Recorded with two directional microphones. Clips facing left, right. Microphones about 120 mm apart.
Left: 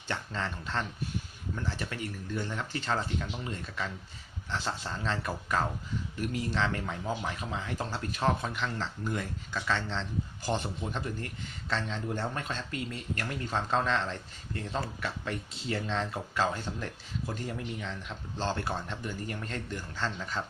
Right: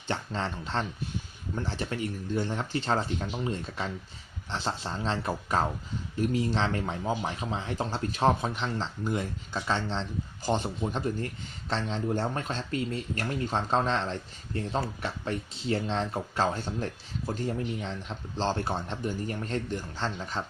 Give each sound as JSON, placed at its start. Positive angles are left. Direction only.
{"t": 0.1, "sound": "speech", "side_deg": -30}